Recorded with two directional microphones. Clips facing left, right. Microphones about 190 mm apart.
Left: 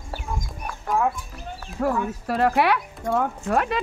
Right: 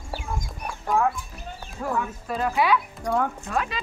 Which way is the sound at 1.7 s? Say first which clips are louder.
Left 4 dB; 70° left (ahead or behind).